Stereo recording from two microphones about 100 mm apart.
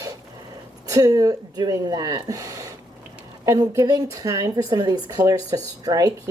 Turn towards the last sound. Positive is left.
turn(degrees=-40)  # may be behind; listen again after turning